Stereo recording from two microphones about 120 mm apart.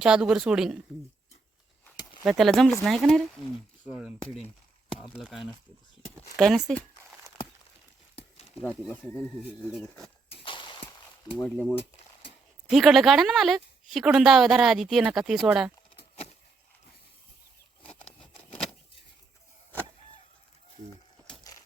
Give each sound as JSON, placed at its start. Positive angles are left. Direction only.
{"t": 0.0, "sound": "a woman's voice", "side_deg": -5}
{"t": 2.2, "sound": "a woman's voice", "side_deg": 0}
{"t": 3.8, "sound": "speech", "side_deg": -10}
{"t": 5.1, "sound": "a woman's voice", "side_deg": 0}
{"t": 8.1, "sound": "a sound", "side_deg": 55}
{"t": 8.6, "sound": "speech", "side_deg": 15}
{"t": 10.4, "sound": "a sound", "side_deg": 40}
{"t": 11.3, "sound": "speech", "side_deg": 15}
{"t": 11.7, "sound": "speech", "side_deg": 55}
{"t": 12.6, "sound": "a woman's voice", "side_deg": 0}